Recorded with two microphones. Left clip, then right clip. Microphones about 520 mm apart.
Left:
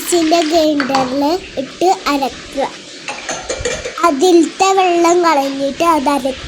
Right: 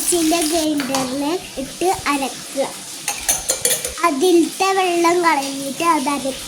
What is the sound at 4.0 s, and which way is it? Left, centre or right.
A child's voice, right.